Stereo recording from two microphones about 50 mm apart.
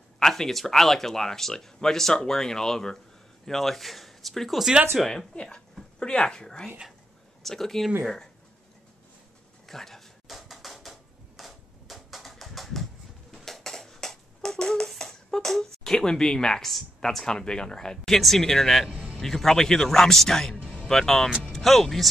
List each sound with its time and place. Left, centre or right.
0.2 s speech: centre
5.3 s speech: left
9.7 s drawer open or close: centre
13.3 s a sound: centre
16.7 s speech: centre
18.9 s a sound: right
19.2 s speech: centre
20.6 s music: centre
20.9 s speech: centre